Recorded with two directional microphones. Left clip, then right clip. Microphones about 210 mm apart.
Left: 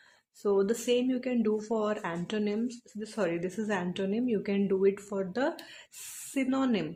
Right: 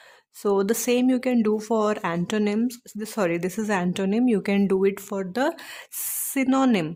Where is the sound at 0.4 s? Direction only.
35° right (ahead or behind).